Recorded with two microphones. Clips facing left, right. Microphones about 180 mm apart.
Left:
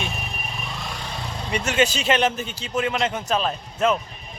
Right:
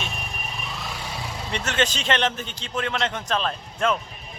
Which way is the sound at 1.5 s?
10° left (ahead or behind).